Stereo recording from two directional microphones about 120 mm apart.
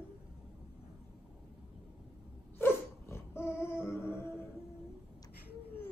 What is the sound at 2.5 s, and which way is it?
Dog, 20° left (ahead or behind).